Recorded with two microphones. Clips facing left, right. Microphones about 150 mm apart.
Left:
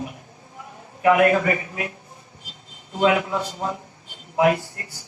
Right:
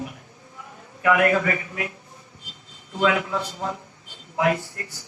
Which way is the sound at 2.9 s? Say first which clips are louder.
Left 2 dB; 20° left (ahead or behind).